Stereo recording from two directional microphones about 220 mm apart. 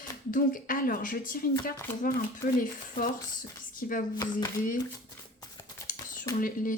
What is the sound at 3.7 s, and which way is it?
Speech, 40° left (ahead or behind).